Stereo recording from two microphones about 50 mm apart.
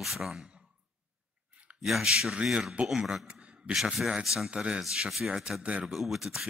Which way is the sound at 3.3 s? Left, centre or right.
Right.